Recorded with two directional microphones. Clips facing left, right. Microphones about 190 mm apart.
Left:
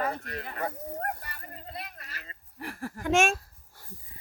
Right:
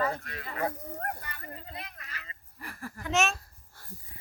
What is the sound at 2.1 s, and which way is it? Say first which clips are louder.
Honk: even; 40° left (ahead or behind).